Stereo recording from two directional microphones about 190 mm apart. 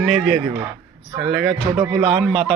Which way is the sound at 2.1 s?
Centre (ahead or behind).